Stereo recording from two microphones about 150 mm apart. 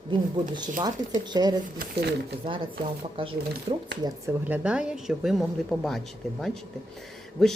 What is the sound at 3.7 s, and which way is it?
Speech, 35° right (ahead or behind).